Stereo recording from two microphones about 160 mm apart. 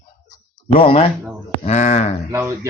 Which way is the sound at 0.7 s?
35° left (ahead or behind).